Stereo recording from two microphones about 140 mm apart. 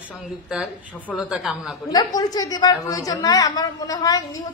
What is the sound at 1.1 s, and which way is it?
Speech, 5° right (ahead or behind).